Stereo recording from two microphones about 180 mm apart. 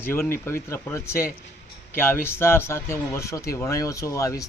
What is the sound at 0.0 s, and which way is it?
Speech, 15° left (ahead or behind).